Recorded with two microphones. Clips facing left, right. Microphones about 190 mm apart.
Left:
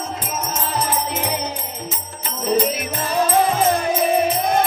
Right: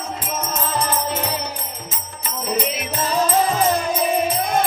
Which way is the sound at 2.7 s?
55° left (ahead or behind).